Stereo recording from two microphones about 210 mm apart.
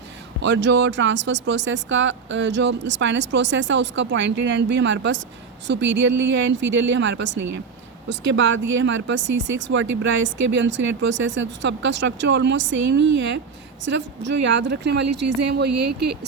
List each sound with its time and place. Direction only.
0.4 s speech: 60° right (ahead or behind)